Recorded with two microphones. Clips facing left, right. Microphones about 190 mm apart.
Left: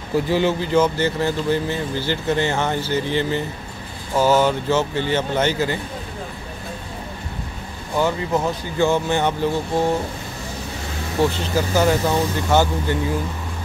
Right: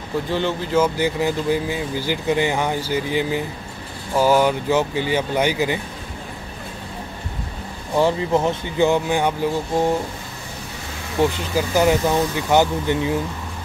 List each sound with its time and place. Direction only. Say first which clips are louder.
0.3 s speech: left 2 dB; 5° left (ahead or behind); by 5.8 s 15° right (ahead or behind)
7.9 s speech: right 2 dB; 25° right (ahead or behind)
11.2 s speech: even; 15° right (ahead or behind)